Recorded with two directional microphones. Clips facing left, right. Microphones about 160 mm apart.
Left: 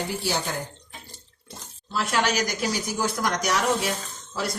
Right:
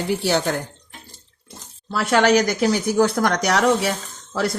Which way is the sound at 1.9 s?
65° right (ahead or behind).